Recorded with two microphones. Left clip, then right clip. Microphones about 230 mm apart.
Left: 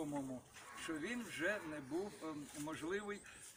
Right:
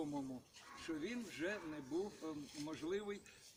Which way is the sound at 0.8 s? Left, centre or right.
Centre.